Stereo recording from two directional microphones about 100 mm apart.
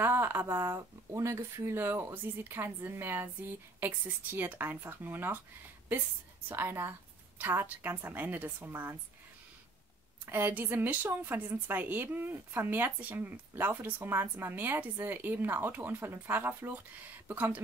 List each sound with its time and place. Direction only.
0.0 s a woman's voice: 20° right (ahead or behind)
6.5 s a woman's voice: 20° right (ahead or behind)
10.2 s a woman's voice: 20° right (ahead or behind)